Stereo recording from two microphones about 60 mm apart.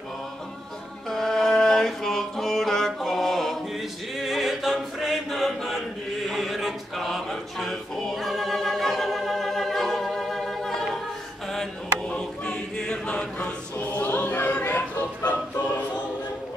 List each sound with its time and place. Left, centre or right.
1.1 s mantra: centre
4.2 s chant: centre
6.2 s choir: centre
12.1 s chant: centre
13.7 s music: left
14.6 s a sound: left